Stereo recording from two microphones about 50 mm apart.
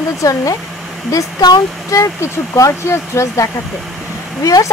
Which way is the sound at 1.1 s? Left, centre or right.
Left.